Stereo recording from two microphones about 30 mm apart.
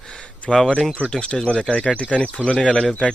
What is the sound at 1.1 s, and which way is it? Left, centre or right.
Speech, left.